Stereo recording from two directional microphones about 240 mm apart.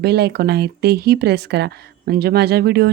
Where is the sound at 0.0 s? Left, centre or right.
Right.